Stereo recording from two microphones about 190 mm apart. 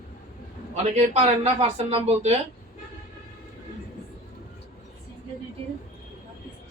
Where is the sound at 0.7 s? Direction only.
35° right (ahead or behind).